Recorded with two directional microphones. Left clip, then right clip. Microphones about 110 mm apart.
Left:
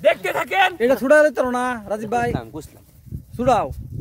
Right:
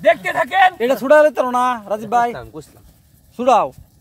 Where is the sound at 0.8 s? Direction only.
15° left (ahead or behind).